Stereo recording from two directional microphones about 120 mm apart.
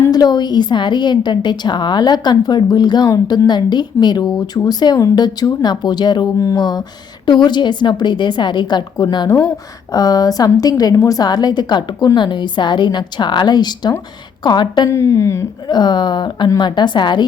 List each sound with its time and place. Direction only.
0.1 s a woman's voice: 35° left (ahead or behind)
14.8 s speech: 25° left (ahead or behind)
15.6 s a woman's voice: 35° left (ahead or behind)